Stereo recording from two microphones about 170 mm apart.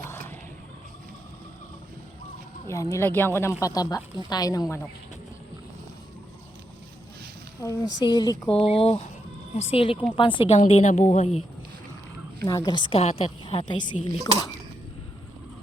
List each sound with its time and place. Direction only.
0.0 s a sound: 15° left (ahead or behind)
2.6 s speech: 15° left (ahead or behind)
7.6 s speech: 20° left (ahead or behind)
8.5 s a woman's voice: 35° left (ahead or behind)
10.6 s a woman's voice: 45° left (ahead or behind)
12.5 s a woman's voice: 20° left (ahead or behind)